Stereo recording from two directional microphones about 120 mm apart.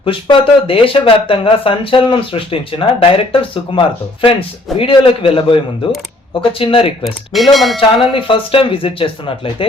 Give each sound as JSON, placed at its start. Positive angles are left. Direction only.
{"t": 0.0, "sound": "speech", "side_deg": 45}
{"t": 7.0, "sound": "speech", "side_deg": 0}
{"t": 8.1, "sound": "speech", "side_deg": 45}